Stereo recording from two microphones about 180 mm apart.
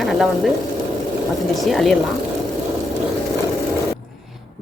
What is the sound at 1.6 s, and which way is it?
Speech, centre (ahead or behind).